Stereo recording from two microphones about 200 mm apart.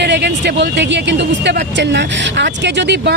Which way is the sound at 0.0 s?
60° right (ahead or behind).